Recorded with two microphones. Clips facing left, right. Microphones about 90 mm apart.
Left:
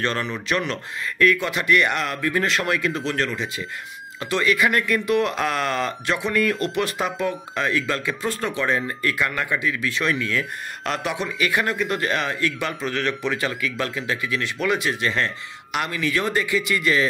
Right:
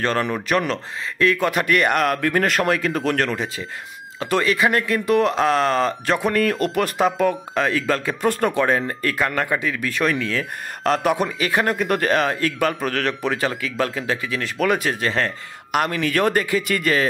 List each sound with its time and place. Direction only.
0.0 s speech: 45° right (ahead or behind)
4.3 s speech: 35° right (ahead or behind)
8.2 s speech: 55° right (ahead or behind)